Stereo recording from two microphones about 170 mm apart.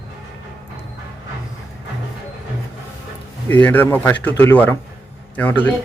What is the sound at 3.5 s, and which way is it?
Speech, 10° left (ahead or behind).